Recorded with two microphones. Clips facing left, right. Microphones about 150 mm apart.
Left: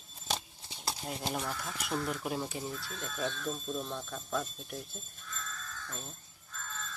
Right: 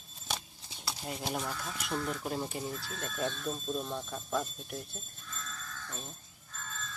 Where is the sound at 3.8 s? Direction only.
10° right (ahead or behind).